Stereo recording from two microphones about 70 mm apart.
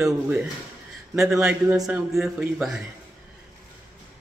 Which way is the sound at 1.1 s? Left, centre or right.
Centre.